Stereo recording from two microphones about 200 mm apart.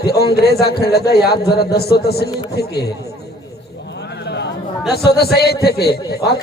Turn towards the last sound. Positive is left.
turn(degrees=55)  # may be behind; listen again after turning